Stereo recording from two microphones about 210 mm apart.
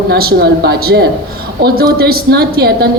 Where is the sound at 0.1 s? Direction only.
50° right (ahead or behind).